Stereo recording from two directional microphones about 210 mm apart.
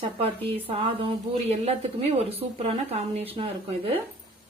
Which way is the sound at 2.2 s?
30° right (ahead or behind).